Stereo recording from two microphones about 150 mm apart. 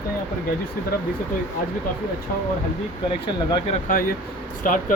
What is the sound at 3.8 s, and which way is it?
Speech, 65° left (ahead or behind).